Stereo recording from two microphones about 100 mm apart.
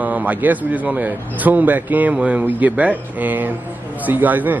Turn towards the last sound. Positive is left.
turn(degrees=-15)  # may be behind; listen again after turning